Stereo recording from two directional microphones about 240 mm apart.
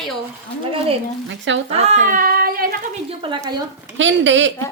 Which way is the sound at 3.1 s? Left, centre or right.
Right.